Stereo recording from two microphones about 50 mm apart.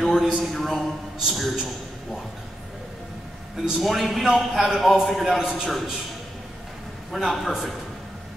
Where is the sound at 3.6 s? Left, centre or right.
Centre.